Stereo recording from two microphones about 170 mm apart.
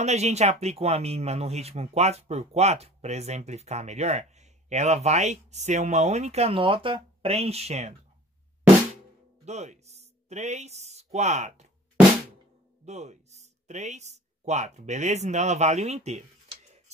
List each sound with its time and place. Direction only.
0.0 s speech: 40° right (ahead or behind)
9.4 s speech: 40° right (ahead or behind)
12.8 s speech: 40° right (ahead or behind)